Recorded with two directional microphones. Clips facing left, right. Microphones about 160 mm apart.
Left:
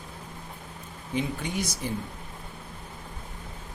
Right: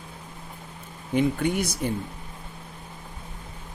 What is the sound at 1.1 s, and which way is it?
Speech, 55° right (ahead or behind).